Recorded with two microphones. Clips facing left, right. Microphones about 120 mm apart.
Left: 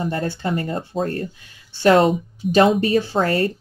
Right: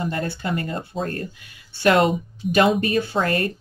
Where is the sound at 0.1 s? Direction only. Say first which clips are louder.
Left 2 dB; 30° left (ahead or behind).